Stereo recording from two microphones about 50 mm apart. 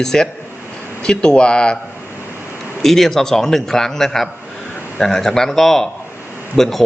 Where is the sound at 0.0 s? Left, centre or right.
Centre.